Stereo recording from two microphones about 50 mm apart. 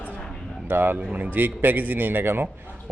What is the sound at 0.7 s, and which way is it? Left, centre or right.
Speech, right.